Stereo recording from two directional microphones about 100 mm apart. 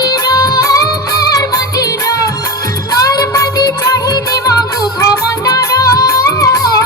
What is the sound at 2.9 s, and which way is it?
Music, 35° left (ahead or behind).